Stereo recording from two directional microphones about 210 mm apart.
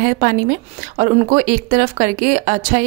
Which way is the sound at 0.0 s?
45° right (ahead or behind).